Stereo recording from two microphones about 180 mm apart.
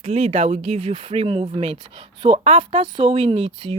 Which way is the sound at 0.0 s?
35° right (ahead or behind).